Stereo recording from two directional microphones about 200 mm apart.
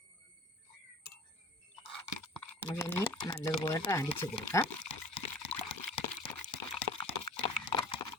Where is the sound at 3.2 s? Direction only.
20° left (ahead or behind).